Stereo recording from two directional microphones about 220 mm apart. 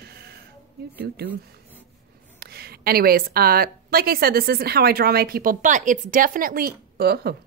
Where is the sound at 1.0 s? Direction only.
45° right (ahead or behind).